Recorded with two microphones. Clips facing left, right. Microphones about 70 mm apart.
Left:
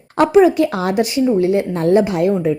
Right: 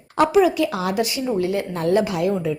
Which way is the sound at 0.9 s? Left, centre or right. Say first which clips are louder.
Left 7 dB; left.